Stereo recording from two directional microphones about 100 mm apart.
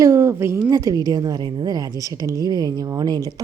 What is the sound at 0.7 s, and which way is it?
A woman's voice, 40° right (ahead or behind).